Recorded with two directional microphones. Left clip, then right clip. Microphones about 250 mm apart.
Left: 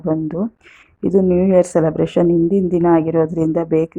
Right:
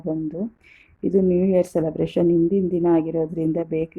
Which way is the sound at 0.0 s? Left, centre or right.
Centre.